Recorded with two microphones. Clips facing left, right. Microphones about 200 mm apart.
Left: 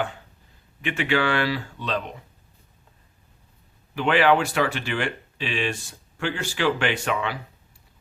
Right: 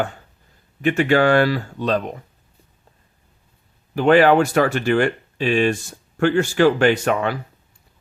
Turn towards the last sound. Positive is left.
turn(degrees=-45)  # may be behind; listen again after turning